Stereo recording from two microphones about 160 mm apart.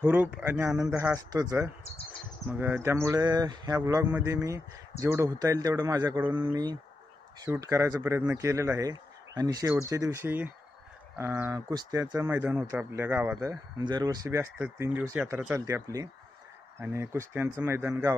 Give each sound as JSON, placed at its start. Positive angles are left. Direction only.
{"t": 0.0, "sound": "speech", "side_deg": -10}
{"t": 2.4, "sound": "speech", "side_deg": -10}
{"t": 6.5, "sound": "speech", "side_deg": -25}
{"t": 7.4, "sound": "speech", "side_deg": -15}